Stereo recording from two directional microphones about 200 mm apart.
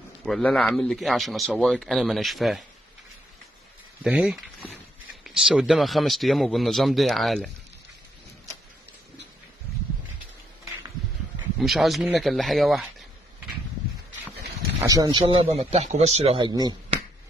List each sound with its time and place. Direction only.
0.2 s a man's voice: centre (ahead or behind)
4.0 s a man's voice: 5° right (ahead or behind)
11.6 s a man's voice: centre (ahead or behind)
14.8 s a man's voice: 15° right (ahead or behind)